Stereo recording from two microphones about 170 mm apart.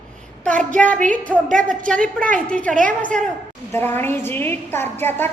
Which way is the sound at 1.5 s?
50° right (ahead or behind).